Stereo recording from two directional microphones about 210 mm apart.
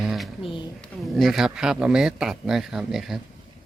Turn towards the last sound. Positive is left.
turn(degrees=0)  # may be behind; listen again after turning